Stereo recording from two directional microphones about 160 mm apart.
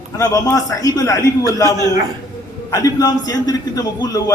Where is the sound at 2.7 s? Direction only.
20° left (ahead or behind).